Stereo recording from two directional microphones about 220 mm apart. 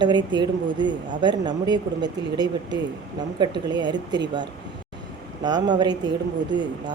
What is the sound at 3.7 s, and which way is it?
Speech, 20° right (ahead or behind).